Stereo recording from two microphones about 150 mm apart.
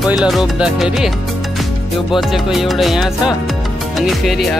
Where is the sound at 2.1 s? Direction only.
Centre (ahead or behind).